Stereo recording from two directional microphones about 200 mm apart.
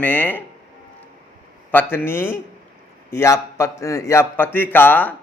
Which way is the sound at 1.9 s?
10° left (ahead or behind).